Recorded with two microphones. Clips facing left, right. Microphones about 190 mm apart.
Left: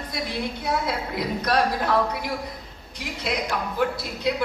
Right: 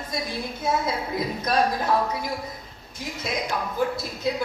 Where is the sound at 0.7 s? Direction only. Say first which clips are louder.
Right 3 dB; 70° left (ahead or behind).